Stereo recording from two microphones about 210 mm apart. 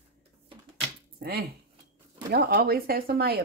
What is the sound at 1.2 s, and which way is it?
Speech, 50° right (ahead or behind).